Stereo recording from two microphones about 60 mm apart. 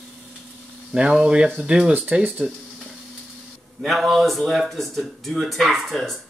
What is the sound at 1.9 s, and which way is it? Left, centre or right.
Speech, right.